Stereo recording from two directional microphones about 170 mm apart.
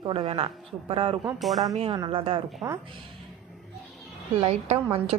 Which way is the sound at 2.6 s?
15° right (ahead or behind).